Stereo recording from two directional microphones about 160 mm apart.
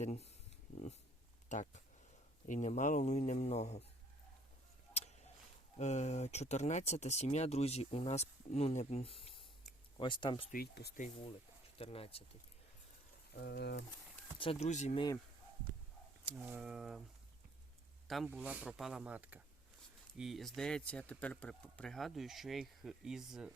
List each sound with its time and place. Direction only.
0.0 s speech: 45° left (ahead or behind)
1.5 s speech: 50° left (ahead or behind)
4.9 s tick-tock: 45° left (ahead or behind)
5.7 s speech: 45° left (ahead or behind)
10.5 s speech: 80° left
11.8 s speech: 35° left (ahead or behind)
13.3 s speech: 90° left
14.3 s speech: 35° left (ahead or behind)
14.9 s speech: 25° left (ahead or behind)
16.2 s speech: 10° right (ahead or behind)
18.3 s speech: 10° right (ahead or behind)